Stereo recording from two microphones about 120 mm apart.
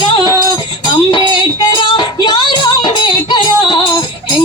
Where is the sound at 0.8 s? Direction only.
40° left (ahead or behind).